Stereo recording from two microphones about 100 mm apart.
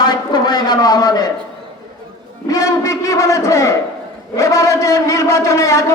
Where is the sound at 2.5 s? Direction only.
35° left (ahead or behind).